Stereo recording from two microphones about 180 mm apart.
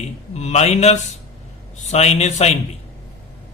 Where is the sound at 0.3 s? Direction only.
35° left (ahead or behind).